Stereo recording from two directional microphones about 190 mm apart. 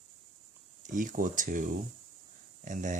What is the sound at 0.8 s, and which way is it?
Speech, 45° right (ahead or behind).